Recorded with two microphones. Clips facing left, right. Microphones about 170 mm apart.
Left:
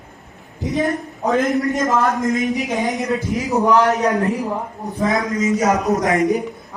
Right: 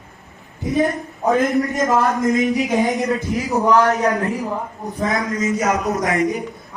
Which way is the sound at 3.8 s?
20° left (ahead or behind).